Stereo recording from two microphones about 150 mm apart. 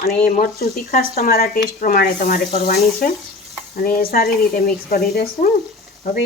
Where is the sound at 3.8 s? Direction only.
80° left.